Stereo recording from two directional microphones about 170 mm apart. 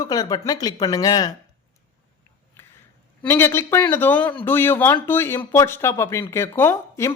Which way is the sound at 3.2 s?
15° left (ahead or behind).